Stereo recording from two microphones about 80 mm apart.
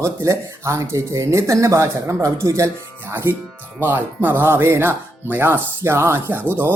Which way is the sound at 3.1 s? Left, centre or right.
Right.